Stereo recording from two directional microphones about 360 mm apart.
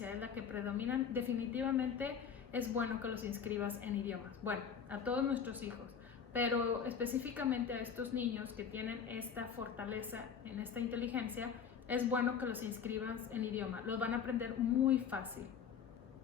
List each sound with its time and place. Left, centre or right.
0.0 s a woman's voice: centre